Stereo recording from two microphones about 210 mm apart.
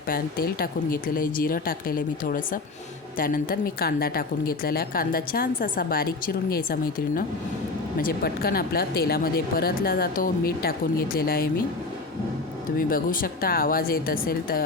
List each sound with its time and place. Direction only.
0.1 s a woman's voice: 45° left (ahead or behind)
8.0 s a woman's voice: 45° left (ahead or behind)
12.9 s a woman's voice: 40° left (ahead or behind)